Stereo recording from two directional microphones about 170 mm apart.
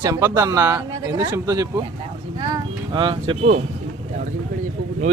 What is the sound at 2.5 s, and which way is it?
Music, 30° right (ahead or behind).